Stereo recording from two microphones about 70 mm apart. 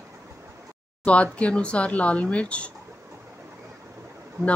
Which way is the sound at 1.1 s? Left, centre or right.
Centre.